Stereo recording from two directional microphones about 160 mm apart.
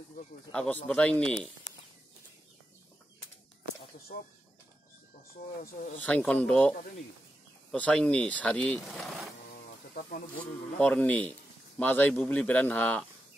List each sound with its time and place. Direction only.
0.5 s speech: 5° left (ahead or behind)
5.6 s speech: 55° left (ahead or behind)
5.9 s speech: 5° left (ahead or behind)
7.7 s speech: 5° left (ahead or behind)
9.5 s a sound: 65° left (ahead or behind)
10.4 s speech: 5° left (ahead or behind)